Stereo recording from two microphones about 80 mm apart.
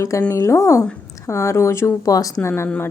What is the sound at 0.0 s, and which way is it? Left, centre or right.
Speech, left.